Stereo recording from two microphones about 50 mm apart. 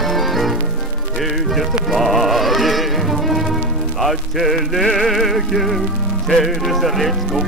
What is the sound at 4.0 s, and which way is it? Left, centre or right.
Music, centre.